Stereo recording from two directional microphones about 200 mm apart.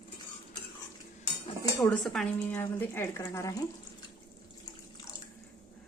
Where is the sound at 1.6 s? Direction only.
15° left (ahead or behind).